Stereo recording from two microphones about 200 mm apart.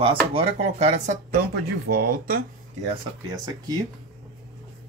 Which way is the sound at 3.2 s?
20° right (ahead or behind).